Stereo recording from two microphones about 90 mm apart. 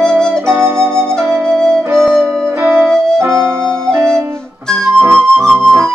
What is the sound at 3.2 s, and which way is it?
Music, 30° right (ahead or behind).